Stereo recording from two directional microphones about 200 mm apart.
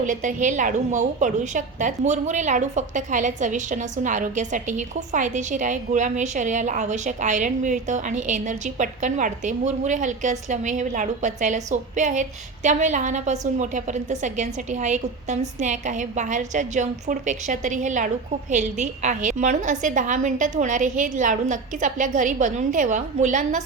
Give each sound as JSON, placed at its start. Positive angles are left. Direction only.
{"t": 0.0, "sound": "a woman's voice", "side_deg": -40}